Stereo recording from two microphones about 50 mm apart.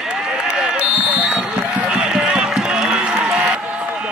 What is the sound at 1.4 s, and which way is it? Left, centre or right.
Run, centre.